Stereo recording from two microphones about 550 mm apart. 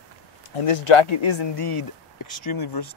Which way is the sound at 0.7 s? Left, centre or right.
Left.